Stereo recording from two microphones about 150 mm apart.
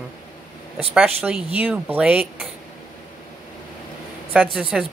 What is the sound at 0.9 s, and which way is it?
Speech, 10° right (ahead or behind).